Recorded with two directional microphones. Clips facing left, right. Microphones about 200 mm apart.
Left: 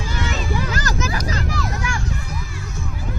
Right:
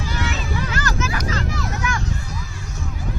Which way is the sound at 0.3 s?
35° left (ahead or behind).